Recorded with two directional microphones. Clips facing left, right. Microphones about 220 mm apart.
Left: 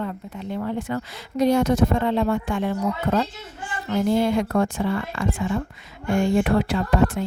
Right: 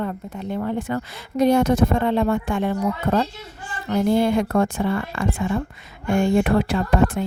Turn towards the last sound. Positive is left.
turn(degrees=-55)  # may be behind; listen again after turning